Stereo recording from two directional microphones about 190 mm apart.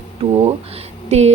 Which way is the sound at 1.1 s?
35° right (ahead or behind).